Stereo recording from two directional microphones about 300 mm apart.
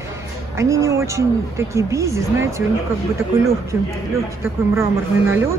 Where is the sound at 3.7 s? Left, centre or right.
Centre.